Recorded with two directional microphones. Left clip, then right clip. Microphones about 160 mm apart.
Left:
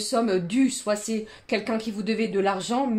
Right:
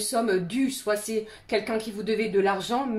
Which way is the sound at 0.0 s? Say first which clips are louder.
Left 1 dB; 45° left (ahead or behind).